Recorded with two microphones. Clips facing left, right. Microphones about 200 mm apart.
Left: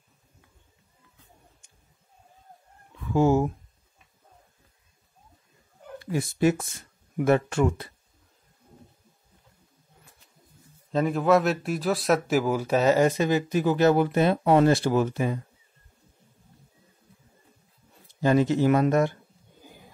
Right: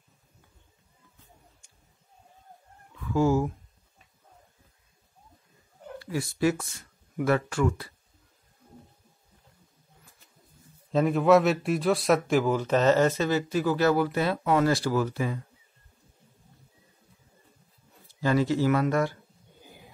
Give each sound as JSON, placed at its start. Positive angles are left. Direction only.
{"t": 3.1, "sound": "speech", "side_deg": 20}
{"t": 5.9, "sound": "speech", "side_deg": 20}
{"t": 10.9, "sound": "speech", "side_deg": 0}
{"t": 18.2, "sound": "speech", "side_deg": 20}